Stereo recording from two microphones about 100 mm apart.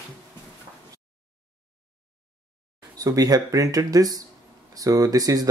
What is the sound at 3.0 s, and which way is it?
Speech, 40° right (ahead or behind).